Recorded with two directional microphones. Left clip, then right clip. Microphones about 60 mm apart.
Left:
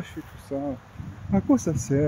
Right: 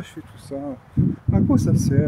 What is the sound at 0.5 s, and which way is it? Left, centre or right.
Speech, right.